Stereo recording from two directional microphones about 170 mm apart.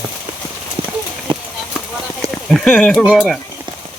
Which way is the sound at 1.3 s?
30° right (ahead or behind).